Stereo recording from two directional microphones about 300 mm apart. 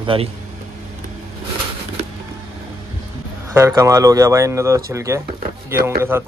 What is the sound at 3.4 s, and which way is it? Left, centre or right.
Speech, centre.